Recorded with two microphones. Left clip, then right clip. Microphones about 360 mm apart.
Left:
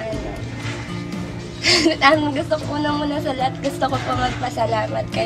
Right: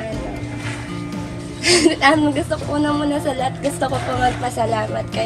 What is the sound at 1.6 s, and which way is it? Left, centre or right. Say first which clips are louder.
A woman's voice: right 1 dB; left.